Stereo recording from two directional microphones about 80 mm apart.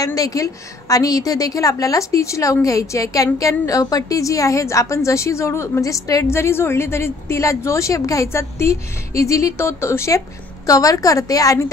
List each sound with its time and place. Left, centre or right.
0.0 s a woman's voice: left